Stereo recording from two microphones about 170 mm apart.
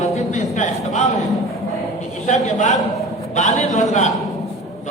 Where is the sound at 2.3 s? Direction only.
45° left (ahead or behind).